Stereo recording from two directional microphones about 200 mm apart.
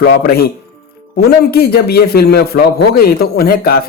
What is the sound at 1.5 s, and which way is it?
Speech, 50° left (ahead or behind).